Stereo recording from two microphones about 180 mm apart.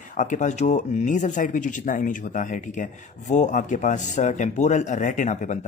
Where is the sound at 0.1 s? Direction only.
45° left (ahead or behind).